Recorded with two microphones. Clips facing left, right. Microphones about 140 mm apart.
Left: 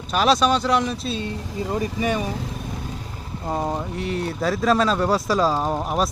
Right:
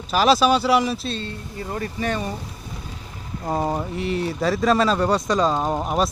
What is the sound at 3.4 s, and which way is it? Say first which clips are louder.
Speech: right 2 dB; centre (ahead or behind).